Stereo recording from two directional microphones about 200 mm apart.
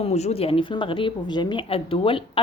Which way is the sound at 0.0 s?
35° left (ahead or behind).